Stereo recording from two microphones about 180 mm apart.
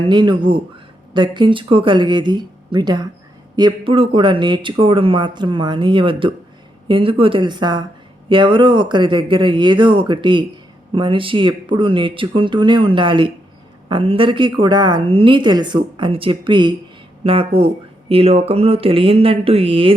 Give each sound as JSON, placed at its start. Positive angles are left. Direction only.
{"t": 0.0, "sound": "a woman's voice", "side_deg": -25}